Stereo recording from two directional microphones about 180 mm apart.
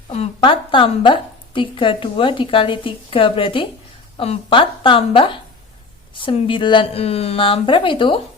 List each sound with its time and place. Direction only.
0.1 s a woman's voice: 30° left (ahead or behind)